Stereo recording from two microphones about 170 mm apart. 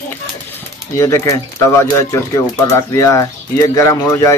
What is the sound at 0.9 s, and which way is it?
Speech, 15° left (ahead or behind).